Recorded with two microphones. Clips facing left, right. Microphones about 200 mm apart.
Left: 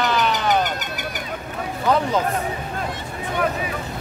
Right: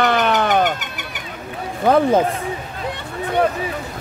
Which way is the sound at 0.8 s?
40° left (ahead or behind).